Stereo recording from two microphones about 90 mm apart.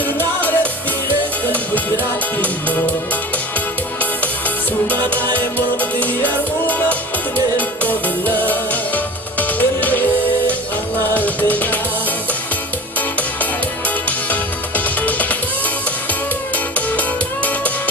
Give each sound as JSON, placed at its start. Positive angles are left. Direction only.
{"t": 0.0, "sound": "music", "side_deg": 20}
{"t": 2.4, "sound": "music", "side_deg": 20}
{"t": 4.9, "sound": "music", "side_deg": 20}
{"t": 11.1, "sound": "music", "side_deg": 20}
{"t": 15.0, "sound": "music", "side_deg": 20}
{"t": 16.7, "sound": "music", "side_deg": 15}